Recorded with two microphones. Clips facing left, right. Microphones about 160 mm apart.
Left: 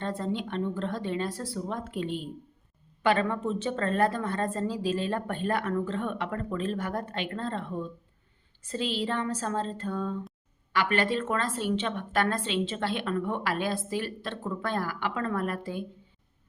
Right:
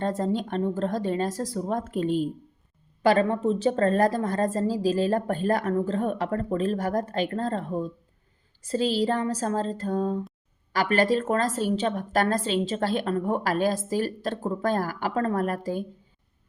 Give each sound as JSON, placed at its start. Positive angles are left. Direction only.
{"t": 0.0, "sound": "a woman's voice", "side_deg": -40}